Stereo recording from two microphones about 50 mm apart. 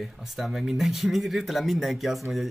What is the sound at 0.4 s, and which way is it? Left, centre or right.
Speech, centre.